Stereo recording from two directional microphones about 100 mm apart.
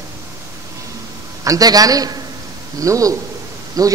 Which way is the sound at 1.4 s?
35° right (ahead or behind).